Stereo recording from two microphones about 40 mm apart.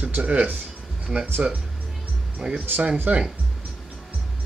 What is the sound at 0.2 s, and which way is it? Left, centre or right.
Speech, right.